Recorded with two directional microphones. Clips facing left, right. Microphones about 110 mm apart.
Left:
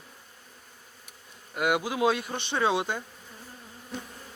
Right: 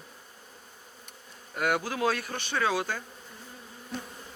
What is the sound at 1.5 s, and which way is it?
Speech, 10° left (ahead or behind).